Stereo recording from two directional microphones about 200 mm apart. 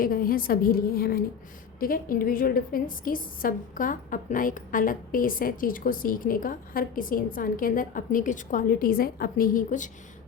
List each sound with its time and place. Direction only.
0.0 s a woman's voice: 45° left (ahead or behind)